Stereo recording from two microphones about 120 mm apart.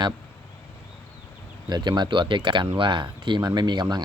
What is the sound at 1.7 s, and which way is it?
Speech, 40° right (ahead or behind).